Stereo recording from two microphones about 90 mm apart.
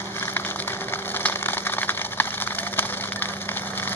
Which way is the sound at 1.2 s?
20° left (ahead or behind).